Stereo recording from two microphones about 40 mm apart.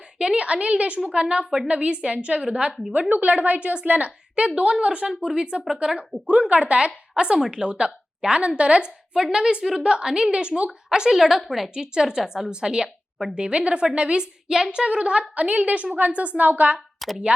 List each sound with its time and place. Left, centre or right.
0.2 s a woman's voice: right
5.0 s a woman's voice: centre
7.3 s a woman's voice: centre
7.6 s a woman's voice: right; by 11.7 s centre
11.7 s a woman's voice: centre; by 16.7 s right
17.0 s speech: centre